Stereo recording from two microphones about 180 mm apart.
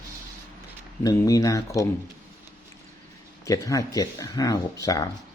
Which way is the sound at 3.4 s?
20° left (ahead or behind).